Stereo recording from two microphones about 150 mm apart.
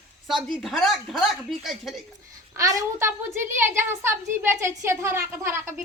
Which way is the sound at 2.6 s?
20° right (ahead or behind).